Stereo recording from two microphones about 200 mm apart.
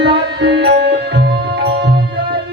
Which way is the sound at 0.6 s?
55° right (ahead or behind).